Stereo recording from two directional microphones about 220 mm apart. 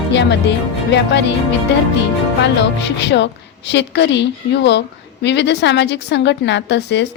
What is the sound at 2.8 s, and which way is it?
A woman's voice, 50° left (ahead or behind).